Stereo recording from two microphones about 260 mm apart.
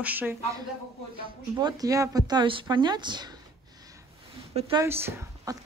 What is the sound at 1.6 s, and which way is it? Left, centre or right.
Speech, centre.